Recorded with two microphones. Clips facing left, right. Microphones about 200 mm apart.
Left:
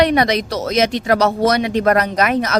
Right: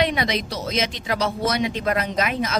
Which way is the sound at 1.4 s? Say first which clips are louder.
Left 7 dB; 40° left (ahead or behind).